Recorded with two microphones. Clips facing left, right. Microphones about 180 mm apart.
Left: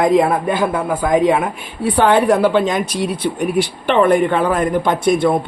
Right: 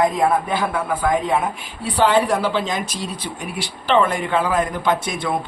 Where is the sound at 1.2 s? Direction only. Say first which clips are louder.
Left 6 dB; 70° left (ahead or behind).